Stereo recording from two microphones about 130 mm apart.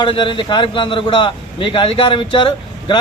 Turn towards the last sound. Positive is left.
turn(degrees=40)  # may be behind; listen again after turning